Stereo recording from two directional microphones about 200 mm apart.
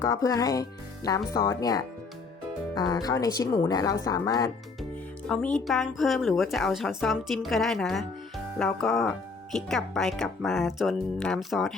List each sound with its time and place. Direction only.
0.0 s speech: 15° left (ahead or behind)
5.3 s speech: 5° left (ahead or behind)